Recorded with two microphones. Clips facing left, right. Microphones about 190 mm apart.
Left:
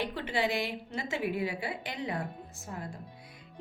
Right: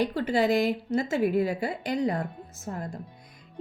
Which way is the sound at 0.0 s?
40° right (ahead or behind).